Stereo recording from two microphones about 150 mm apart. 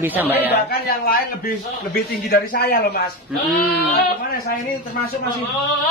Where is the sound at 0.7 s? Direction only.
85° left.